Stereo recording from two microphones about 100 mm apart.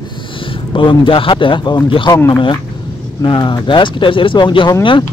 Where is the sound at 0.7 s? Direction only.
55° left (ahead or behind).